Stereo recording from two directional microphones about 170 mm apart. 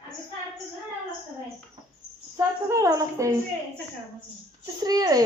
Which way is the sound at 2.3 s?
20° right (ahead or behind).